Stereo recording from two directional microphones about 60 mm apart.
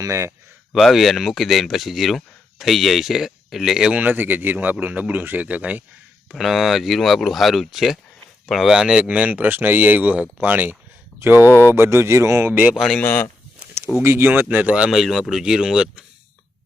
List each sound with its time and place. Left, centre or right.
0.0 s speech: right
0.7 s speech: centre
3.9 s speech: right
6.3 s speech: centre
8.7 s speech: centre
9.3 s speech: right
11.4 s speech: left
11.7 s speech: right
12.7 s speech: centre
13.0 s speech: left
14.0 s speech: right
14.4 s speech: right
14.8 s speech: centre